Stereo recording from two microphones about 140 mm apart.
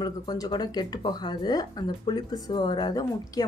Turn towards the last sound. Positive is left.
turn(degrees=30)  # may be behind; listen again after turning